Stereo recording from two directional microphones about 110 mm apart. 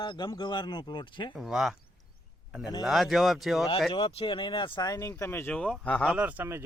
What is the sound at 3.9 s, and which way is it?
Speech, 55° left (ahead or behind).